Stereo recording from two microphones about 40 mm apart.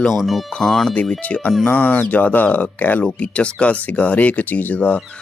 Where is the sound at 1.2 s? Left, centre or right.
Left.